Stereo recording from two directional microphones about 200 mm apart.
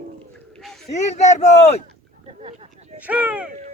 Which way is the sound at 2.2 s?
30° right (ahead or behind).